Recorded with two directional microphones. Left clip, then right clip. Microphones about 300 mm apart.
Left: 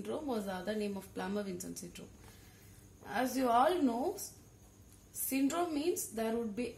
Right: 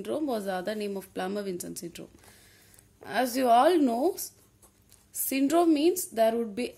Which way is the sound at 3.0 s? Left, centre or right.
Right.